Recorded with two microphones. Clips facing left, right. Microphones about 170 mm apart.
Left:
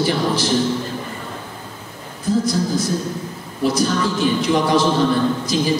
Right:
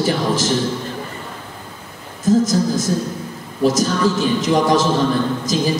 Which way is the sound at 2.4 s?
45° right (ahead or behind).